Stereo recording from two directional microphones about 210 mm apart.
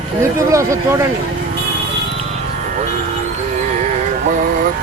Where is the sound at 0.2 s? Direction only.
15° right (ahead or behind).